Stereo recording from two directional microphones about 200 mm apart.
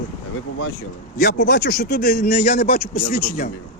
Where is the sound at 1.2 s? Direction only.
55° left (ahead or behind).